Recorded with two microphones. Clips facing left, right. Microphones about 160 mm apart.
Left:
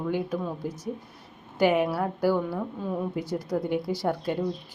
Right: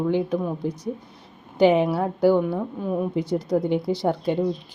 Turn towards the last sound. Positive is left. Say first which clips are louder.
# right 5 dB
turn(degrees=-20)  # may be behind; listen again after turning